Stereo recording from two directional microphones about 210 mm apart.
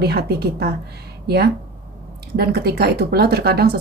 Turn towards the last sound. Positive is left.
turn(degrees=-50)  # may be behind; listen again after turning